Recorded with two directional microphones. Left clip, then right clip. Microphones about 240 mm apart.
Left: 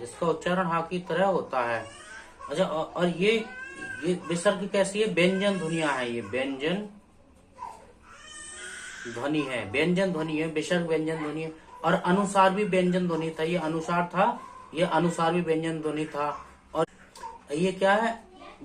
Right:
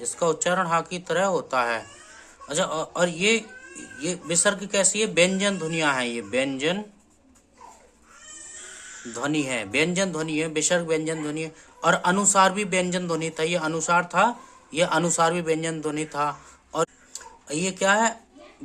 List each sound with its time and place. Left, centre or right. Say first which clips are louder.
0.2 s speech: right 4 dB; right
9.1 s speech: right 3 dB; right
17.6 s speech: right 2 dB; right